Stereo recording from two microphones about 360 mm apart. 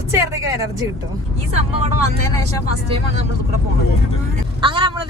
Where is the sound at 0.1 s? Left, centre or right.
Centre.